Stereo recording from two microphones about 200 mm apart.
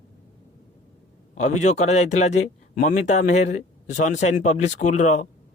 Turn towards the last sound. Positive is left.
turn(degrees=35)  # may be behind; listen again after turning